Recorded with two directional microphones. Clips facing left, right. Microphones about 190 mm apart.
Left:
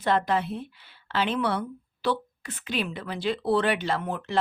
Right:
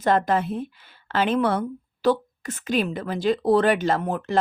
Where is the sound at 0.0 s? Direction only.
45° right (ahead or behind).